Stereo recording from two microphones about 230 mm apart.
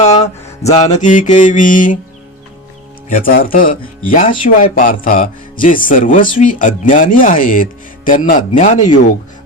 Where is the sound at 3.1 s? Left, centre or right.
Left.